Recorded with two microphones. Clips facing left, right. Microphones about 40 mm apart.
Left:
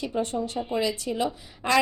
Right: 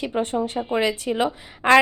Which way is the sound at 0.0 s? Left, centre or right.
Right.